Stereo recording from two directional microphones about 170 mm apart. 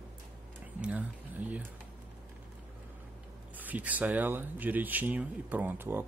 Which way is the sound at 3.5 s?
10° right (ahead or behind).